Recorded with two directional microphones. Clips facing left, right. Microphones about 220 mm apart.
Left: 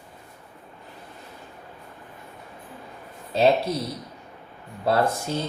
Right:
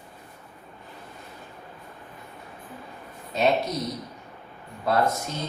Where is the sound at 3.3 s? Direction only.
30° left (ahead or behind).